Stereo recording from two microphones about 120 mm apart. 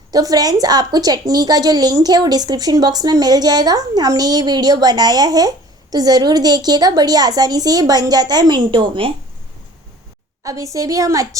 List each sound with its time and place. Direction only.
0.1 s a woman's voice: 30° right (ahead or behind)
10.4 s a woman's voice: 25° right (ahead or behind)